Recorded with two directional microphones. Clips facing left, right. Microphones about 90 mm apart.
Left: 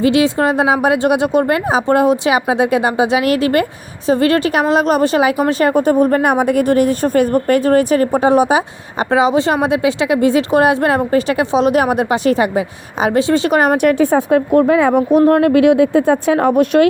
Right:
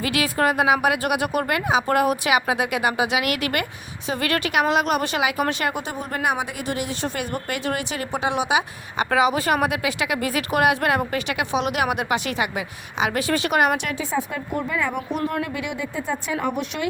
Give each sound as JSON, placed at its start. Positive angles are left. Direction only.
{"t": 0.0, "sound": "speech", "side_deg": 25}
{"t": 14.9, "sound": "speech", "side_deg": 50}